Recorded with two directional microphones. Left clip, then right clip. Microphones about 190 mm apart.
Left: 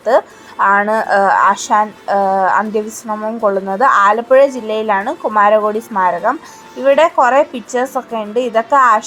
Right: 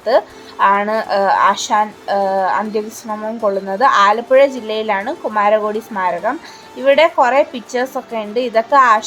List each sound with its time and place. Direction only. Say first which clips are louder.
0.6 s a woman's voice: left 2 dB; 5° left (ahead or behind)